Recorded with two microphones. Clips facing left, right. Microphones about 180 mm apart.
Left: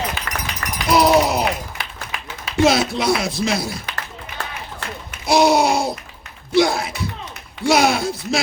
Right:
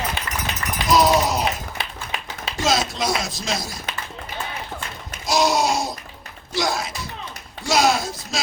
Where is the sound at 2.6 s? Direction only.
60° left (ahead or behind).